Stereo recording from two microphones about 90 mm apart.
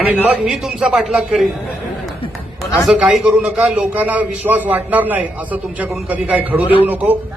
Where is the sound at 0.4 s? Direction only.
5° right (ahead or behind).